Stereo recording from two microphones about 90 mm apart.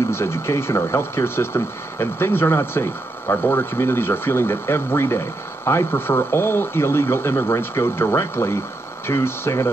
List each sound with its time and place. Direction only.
0.1 s speech: 30° left (ahead or behind)